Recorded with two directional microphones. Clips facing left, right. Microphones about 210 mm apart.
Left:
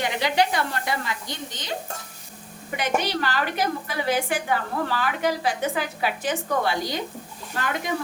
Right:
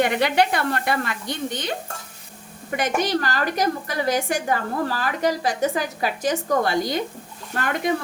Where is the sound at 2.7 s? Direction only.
50° right (ahead or behind).